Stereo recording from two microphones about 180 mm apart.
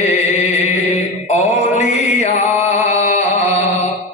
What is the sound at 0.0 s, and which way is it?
Chant, 40° left (ahead or behind).